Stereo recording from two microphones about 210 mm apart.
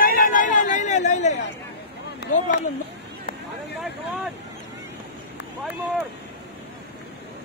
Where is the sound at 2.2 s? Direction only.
50° left (ahead or behind).